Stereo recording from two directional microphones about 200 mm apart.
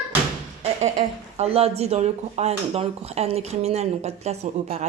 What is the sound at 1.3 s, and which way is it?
Speech, 30° right (ahead or behind).